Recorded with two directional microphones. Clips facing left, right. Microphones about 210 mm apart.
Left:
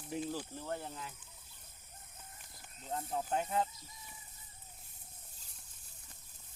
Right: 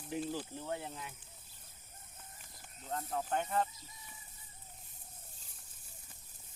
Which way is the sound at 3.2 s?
5° left (ahead or behind).